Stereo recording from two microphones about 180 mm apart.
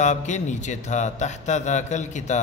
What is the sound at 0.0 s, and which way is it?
A man's voice, 40° left (ahead or behind).